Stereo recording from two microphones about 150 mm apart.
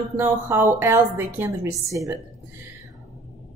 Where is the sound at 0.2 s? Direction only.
15° right (ahead or behind).